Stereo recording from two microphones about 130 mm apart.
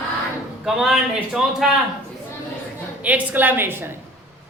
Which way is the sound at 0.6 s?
5° right (ahead or behind).